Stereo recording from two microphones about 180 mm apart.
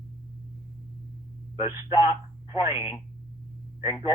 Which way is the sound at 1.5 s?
25° left (ahead or behind).